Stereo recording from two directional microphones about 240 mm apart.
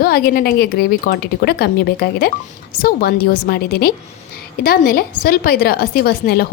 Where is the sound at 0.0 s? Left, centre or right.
Left.